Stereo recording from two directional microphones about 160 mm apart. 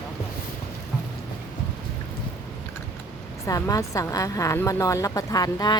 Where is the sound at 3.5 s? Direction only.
20° left (ahead or behind).